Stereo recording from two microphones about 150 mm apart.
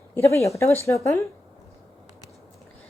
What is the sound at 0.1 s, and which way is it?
Speech, 15° left (ahead or behind).